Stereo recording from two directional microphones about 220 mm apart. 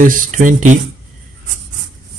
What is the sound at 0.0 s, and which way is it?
Speech, 35° right (ahead or behind).